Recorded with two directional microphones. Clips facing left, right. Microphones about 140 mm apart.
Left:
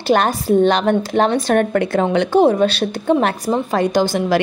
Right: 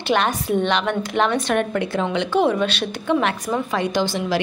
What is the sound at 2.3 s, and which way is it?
A woman's voice, 40° left (ahead or behind).